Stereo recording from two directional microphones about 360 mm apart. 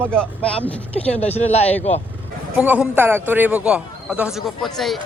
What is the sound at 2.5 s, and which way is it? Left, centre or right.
A man's voice, centre.